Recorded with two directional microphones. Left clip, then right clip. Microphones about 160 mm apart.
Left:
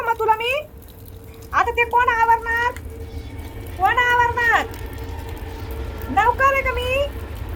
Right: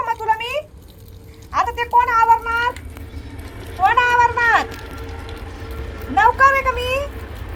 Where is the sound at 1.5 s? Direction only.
25° left (ahead or behind).